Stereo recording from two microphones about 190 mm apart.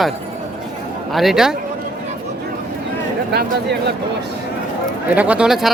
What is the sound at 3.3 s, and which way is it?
Speech, 60° right (ahead or behind).